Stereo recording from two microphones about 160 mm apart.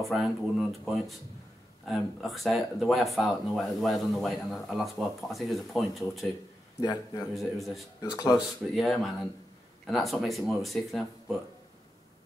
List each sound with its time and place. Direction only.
0.1 s speech: centre (ahead or behind)
6.8 s speech: 25° left (ahead or behind)
7.3 s speech: centre (ahead or behind)
8.0 s speech: 25° left (ahead or behind)
8.4 s speech: centre (ahead or behind)